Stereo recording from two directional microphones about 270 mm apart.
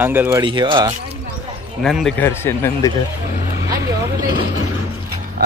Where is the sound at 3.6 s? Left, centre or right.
Centre.